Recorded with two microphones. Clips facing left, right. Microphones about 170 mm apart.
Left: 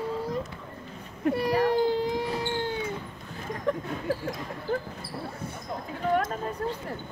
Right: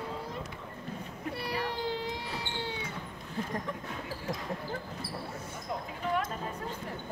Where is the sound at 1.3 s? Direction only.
45° left (ahead or behind).